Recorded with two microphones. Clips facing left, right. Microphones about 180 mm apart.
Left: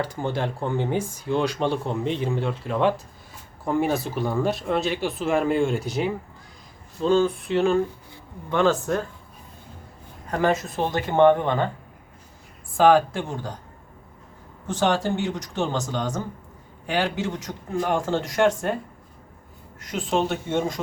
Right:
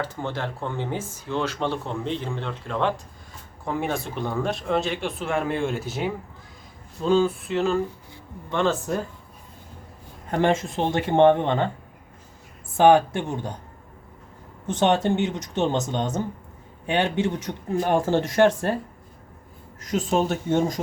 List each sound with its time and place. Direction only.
0.0 s speech: 15° left (ahead or behind)
10.3 s speech: 25° right (ahead or behind)
12.7 s speech: 25° right (ahead or behind)
14.7 s a man's voice: 20° right (ahead or behind)
19.8 s a man's voice: 40° right (ahead or behind)